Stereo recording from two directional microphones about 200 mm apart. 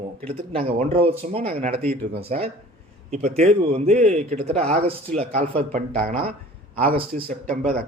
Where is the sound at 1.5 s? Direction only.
40° right (ahead or behind).